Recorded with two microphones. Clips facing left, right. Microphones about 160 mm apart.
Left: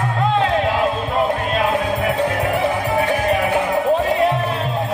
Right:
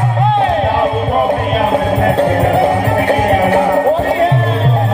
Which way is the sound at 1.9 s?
80° right.